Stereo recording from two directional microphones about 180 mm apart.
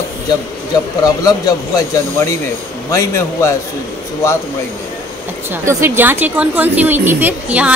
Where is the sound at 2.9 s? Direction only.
15° left (ahead or behind).